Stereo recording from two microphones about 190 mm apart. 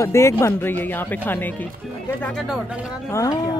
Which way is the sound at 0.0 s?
15° left (ahead or behind).